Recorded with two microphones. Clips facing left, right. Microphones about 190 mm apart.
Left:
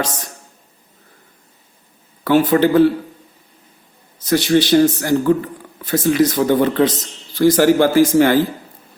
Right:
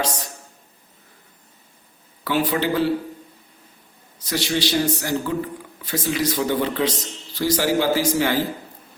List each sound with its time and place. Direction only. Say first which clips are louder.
2.2 s speech: left 8 dB; 45° left (ahead or behind)
4.3 s speech: left 9 dB; 50° left (ahead or behind)